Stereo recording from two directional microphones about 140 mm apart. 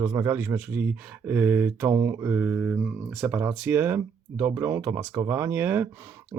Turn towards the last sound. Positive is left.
turn(degrees=-15)  # may be behind; listen again after turning